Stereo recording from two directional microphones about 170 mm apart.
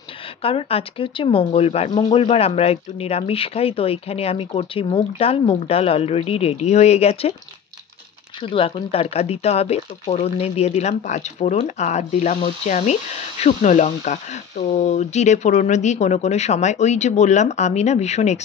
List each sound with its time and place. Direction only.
0.4 s speech: 35° left (ahead or behind)
8.4 s speech: 30° left (ahead or behind)